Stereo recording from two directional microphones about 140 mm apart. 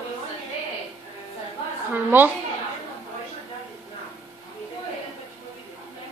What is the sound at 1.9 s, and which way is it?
Speech, 15° right (ahead or behind).